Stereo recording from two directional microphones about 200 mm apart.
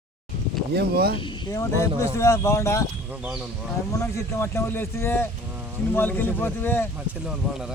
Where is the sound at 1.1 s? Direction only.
25° left (ahead or behind).